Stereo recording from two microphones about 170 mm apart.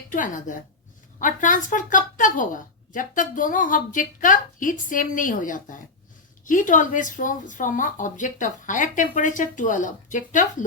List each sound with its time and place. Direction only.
0.1 s a woman's voice: 50° left (ahead or behind)